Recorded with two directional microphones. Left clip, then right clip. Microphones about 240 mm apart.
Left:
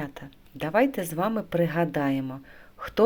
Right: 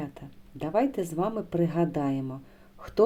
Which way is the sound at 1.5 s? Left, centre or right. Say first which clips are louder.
Left 2 dB; centre.